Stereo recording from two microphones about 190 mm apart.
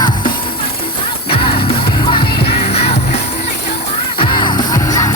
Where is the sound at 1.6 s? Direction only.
30° left (ahead or behind).